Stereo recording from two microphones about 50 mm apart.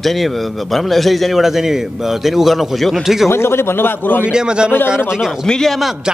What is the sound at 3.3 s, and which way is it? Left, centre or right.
A man's voice, left.